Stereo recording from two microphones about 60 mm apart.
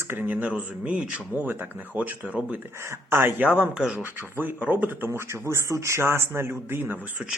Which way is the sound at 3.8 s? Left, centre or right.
Centre.